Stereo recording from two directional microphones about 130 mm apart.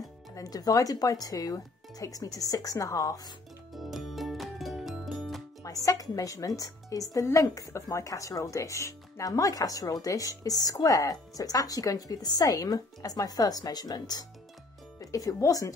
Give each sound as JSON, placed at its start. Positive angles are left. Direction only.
{"t": 0.3, "sound": "a woman's voice", "side_deg": 30}
{"t": 3.7, "sound": "music", "side_deg": 0}
{"t": 5.6, "sound": "a woman's voice", "side_deg": 25}